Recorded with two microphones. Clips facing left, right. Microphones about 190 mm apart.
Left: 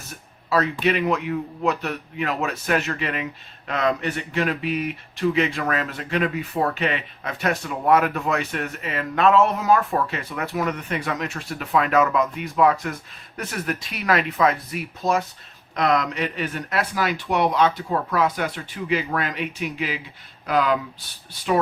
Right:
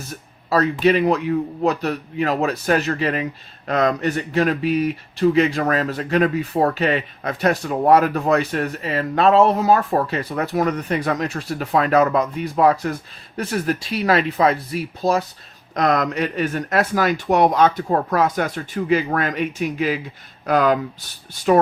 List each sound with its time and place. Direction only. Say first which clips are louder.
0.5 s speech: right 5 dB; 40° right (ahead or behind)